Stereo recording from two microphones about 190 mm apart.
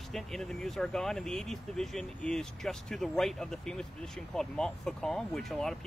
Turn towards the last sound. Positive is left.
turn(degrees=0)  # may be behind; listen again after turning